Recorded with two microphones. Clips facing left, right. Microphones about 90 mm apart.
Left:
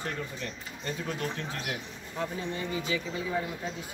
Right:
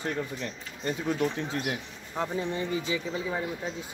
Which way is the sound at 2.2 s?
25° right (ahead or behind).